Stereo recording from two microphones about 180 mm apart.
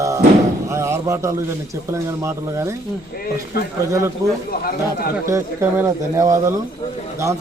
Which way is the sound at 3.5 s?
60° left (ahead or behind).